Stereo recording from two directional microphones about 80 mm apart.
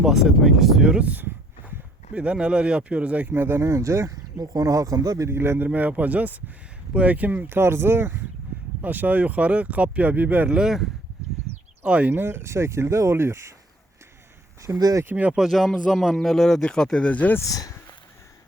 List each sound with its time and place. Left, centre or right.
0.0 s speech: centre; by 10.5 s right
10.5 s speech: centre
11.8 s speech: centre; by 13.5 s right
14.8 s speech: right
15.1 s speech: centre
15.4 s speech: centre
17.5 s speech: left